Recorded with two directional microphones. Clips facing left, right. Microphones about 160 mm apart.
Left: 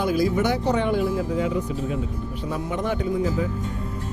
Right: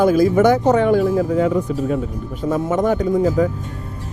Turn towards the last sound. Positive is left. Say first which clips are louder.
# right 7 dB
turn(degrees=-45)  # may be behind; listen again after turning